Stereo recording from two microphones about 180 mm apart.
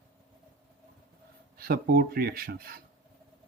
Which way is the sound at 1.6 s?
55° right (ahead or behind).